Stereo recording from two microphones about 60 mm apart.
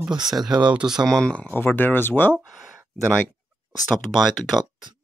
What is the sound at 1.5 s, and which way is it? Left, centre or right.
Speech, left.